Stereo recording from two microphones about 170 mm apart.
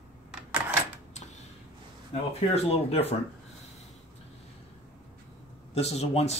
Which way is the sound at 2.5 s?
35° left (ahead or behind).